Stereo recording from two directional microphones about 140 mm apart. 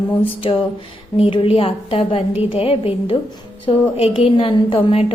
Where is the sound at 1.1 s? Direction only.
40° left (ahead or behind).